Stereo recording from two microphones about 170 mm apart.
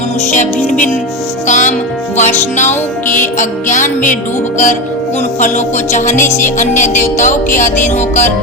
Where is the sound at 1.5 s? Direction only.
45° left (ahead or behind).